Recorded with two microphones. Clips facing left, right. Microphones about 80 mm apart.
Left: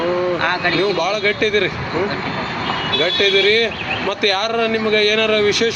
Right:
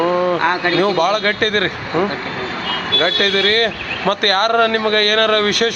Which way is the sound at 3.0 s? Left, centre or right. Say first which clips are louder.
Left 1 dB; right.